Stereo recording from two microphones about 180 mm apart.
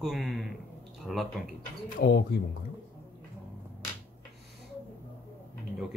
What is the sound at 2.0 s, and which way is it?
Speech, 65° left (ahead or behind).